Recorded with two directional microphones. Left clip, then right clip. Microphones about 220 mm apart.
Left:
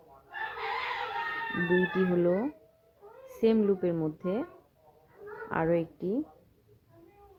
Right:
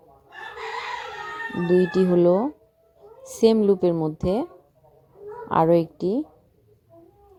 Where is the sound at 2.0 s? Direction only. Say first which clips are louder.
Right 8 dB; 30° right (ahead or behind).